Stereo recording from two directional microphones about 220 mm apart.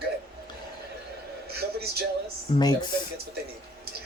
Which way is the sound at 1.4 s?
45° right (ahead or behind).